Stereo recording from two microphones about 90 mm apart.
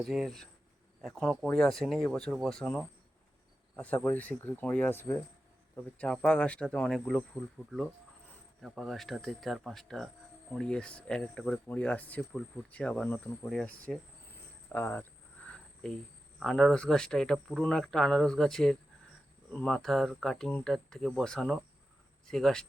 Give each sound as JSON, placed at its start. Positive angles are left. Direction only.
{"t": 0.0, "sound": "speech", "side_deg": -5}
{"t": 6.0, "sound": "speech", "side_deg": 10}
{"t": 8.6, "sound": "speech", "side_deg": -5}
{"t": 14.7, "sound": "speech", "side_deg": 20}
{"t": 15.4, "sound": "a sound", "side_deg": 5}
{"t": 16.4, "sound": "speech", "side_deg": 5}